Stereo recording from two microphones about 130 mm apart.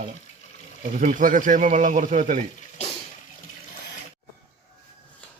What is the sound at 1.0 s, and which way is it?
Speech, 80° right.